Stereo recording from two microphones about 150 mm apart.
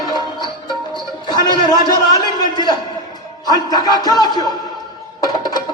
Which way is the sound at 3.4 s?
25° left (ahead or behind).